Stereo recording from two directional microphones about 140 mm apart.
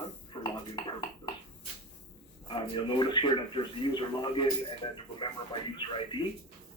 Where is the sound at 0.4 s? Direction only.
35° left (ahead or behind).